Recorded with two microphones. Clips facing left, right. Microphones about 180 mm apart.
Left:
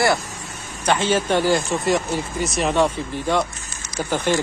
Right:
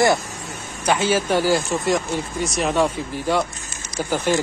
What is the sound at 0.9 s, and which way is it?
Speech, 10° right (ahead or behind).